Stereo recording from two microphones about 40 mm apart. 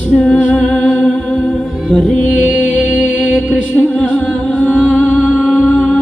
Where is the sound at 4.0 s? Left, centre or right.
Left.